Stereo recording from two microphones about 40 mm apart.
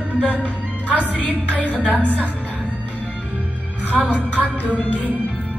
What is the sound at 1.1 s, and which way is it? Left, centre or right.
Music, left.